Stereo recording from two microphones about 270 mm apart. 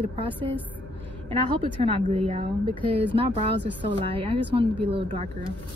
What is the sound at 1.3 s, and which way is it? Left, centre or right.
Speech, centre.